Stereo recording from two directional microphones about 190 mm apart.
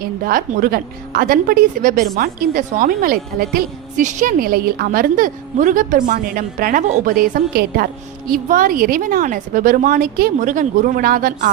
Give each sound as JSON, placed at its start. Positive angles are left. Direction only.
{"t": 0.0, "sound": "a woman's voice", "side_deg": -50}